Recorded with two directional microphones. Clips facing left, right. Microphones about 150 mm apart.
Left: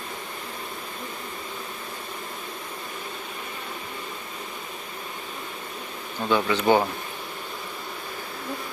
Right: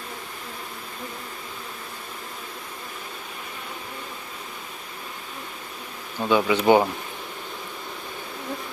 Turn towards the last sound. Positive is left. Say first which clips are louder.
# right 3 dB
turn(degrees=-15)  # may be behind; listen again after turning